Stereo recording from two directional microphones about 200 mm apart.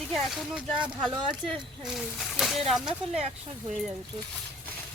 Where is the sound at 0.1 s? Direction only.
Centre (ahead or behind).